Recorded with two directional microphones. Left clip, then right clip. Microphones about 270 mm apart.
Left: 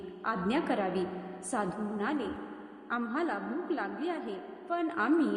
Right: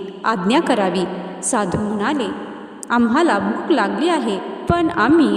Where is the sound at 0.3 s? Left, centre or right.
Right.